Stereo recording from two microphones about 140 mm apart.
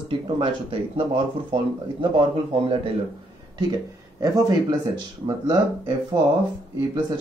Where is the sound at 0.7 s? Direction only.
40° right (ahead or behind).